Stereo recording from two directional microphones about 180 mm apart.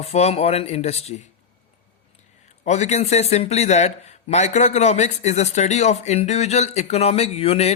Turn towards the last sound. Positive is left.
turn(degrees=35)  # may be behind; listen again after turning